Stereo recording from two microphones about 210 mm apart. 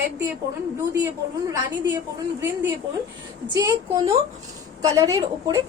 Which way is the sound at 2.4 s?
10° right (ahead or behind).